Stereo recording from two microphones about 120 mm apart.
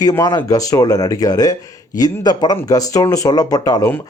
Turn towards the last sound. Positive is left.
turn(degrees=30)  # may be behind; listen again after turning